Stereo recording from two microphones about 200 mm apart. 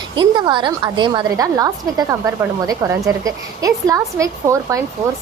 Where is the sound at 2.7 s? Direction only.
15° right (ahead or behind).